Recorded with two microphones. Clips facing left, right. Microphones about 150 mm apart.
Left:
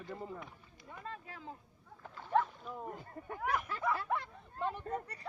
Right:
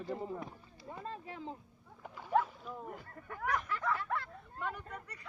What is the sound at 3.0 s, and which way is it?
Speech, 25° left (ahead or behind).